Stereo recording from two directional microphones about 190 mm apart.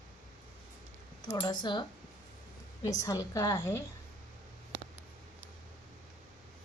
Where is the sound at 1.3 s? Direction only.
20° left (ahead or behind).